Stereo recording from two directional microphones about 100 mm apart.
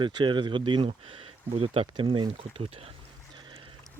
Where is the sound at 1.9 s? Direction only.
60° right (ahead or behind).